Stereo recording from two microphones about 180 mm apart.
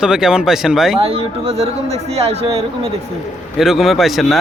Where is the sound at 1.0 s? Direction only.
35° right (ahead or behind).